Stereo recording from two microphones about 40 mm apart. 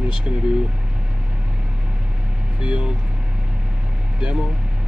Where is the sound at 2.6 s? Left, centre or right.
Right.